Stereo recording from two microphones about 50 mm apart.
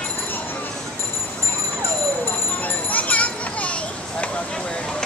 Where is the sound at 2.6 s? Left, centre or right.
Left.